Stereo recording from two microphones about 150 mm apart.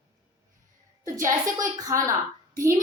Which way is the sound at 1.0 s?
20° right (ahead or behind).